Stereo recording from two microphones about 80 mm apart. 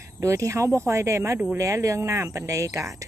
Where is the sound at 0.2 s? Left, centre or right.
Right.